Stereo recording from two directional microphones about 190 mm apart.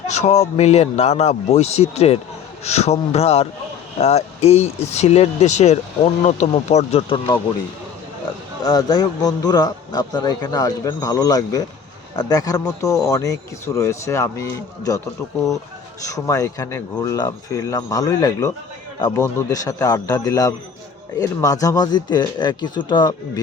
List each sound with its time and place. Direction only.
0.2 s speech: 35° left (ahead or behind)
8.6 s speech: 20° left (ahead or behind)
16.0 s a man's voice: 15° left (ahead or behind)